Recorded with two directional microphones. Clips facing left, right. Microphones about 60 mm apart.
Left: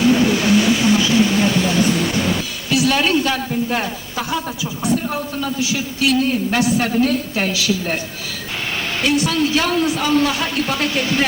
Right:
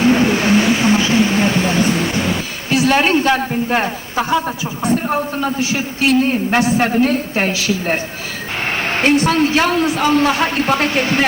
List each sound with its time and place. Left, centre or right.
0.0 s vehicle: right
2.6 s a man's voice: right